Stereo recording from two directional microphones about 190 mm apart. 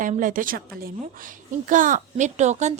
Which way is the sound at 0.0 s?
45° right (ahead or behind).